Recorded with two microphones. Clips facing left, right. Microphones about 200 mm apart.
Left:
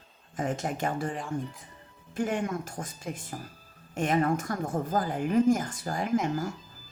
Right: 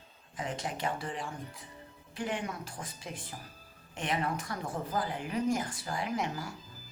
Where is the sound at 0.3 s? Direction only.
45° left (ahead or behind).